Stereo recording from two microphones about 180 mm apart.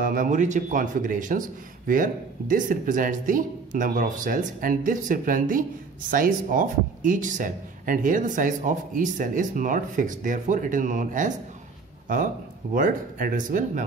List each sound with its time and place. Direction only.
0.0 s speech: 50° right (ahead or behind)
12.7 s speech: 50° right (ahead or behind)